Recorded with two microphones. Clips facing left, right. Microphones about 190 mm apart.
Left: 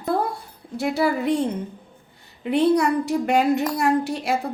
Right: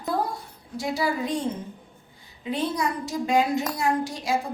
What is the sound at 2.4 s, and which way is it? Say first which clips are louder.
Speech: left 8 dB; 65° left (ahead or behind).